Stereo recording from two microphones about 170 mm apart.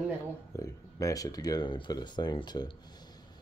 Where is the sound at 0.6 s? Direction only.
20° left (ahead or behind).